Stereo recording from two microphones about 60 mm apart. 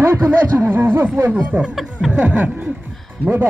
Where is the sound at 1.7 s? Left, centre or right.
Centre.